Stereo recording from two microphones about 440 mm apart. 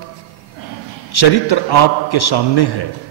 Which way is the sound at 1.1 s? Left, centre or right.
Left.